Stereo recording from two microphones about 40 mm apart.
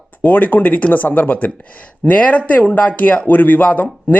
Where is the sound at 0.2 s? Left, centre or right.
Left.